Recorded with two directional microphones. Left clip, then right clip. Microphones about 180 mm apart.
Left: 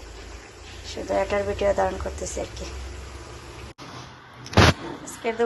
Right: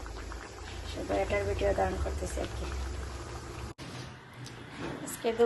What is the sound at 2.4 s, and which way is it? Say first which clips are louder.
Speech: left 6 dB; 15° left (ahead or behind).